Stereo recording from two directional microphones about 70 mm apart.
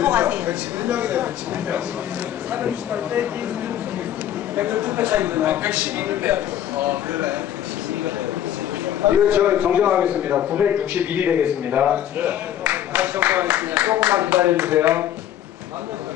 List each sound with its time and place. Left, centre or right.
0.0 s a man's voice: right
4.6 s a man's voice: right
8.8 s a man's voice: right